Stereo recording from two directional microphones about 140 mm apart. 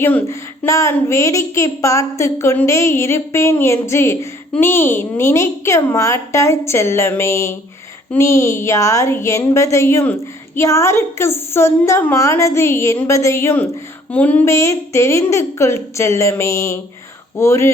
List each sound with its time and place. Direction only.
0.0 s a woman's voice: 15° left (ahead or behind)